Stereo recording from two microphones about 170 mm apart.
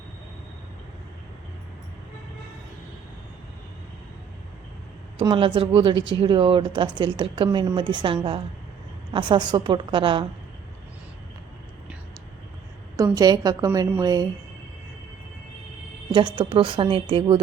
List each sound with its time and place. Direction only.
5.1 s speech: 30° right (ahead or behind)
13.0 s speech: 20° right (ahead or behind)
16.1 s speech: 30° right (ahead or behind)